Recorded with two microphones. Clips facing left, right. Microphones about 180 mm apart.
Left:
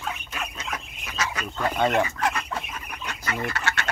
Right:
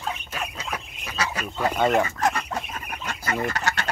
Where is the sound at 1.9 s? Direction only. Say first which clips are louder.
Right 2 dB; 35° right (ahead or behind).